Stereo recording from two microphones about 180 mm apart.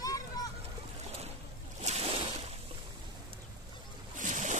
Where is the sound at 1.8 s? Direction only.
35° right (ahead or behind).